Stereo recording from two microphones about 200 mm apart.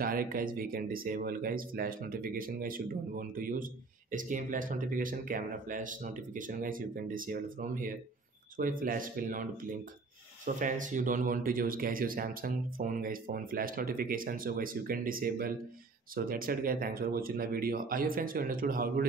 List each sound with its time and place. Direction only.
0.0 s speech: 45° right (ahead or behind)